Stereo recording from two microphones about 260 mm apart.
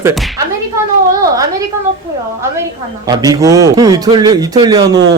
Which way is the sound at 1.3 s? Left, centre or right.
Centre.